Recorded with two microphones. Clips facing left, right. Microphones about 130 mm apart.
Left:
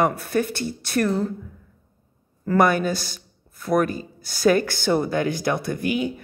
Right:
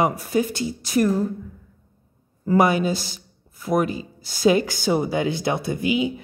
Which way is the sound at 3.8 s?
55° left (ahead or behind).